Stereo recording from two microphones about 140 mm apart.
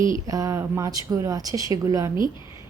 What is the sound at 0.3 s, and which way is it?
Speech, 25° right (ahead or behind).